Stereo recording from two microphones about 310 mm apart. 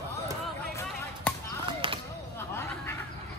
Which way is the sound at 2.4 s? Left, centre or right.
Centre.